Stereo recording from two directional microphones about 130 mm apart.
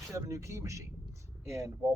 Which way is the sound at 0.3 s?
25° right (ahead or behind).